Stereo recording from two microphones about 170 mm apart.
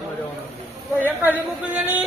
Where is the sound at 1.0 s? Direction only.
10° right (ahead or behind).